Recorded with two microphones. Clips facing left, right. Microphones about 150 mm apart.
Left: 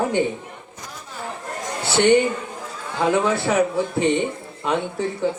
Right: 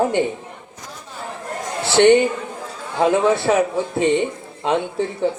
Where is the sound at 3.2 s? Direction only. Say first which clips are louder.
Right 3 dB; 25° right (ahead or behind).